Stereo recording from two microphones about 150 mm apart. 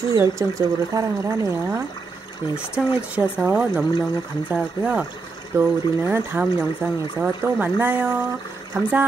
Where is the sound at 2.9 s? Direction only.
10° right (ahead or behind).